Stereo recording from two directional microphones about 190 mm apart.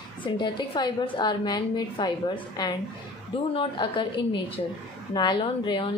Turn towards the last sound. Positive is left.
turn(degrees=25)  # may be behind; listen again after turning